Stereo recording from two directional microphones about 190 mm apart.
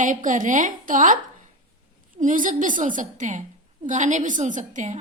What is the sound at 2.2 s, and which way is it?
A woman's voice, 40° right (ahead or behind).